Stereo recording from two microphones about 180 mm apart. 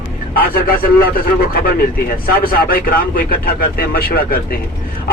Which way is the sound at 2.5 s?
50° left (ahead or behind).